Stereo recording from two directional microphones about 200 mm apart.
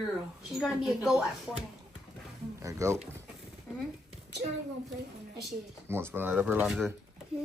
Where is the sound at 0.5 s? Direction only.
Centre (ahead or behind).